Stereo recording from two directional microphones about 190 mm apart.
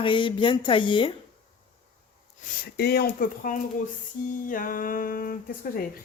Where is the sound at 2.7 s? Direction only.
60° left (ahead or behind).